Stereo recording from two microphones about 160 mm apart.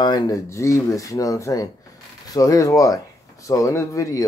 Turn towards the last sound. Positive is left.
turn(degrees=20)  # may be behind; listen again after turning